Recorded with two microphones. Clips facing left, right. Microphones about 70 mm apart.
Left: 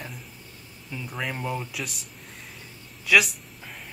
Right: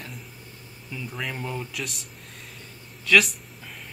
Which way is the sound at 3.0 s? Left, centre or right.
Centre.